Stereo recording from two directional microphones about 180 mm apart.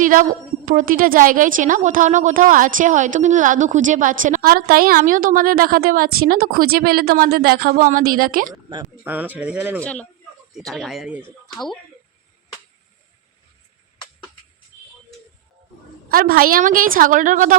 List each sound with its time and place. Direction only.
0.0 s a woman's voice: 50° right (ahead or behind)
9.0 s speech: 10° right (ahead or behind)
9.8 s speech: 5° left (ahead or behind)
16.0 s a woman's voice: 55° right (ahead or behind)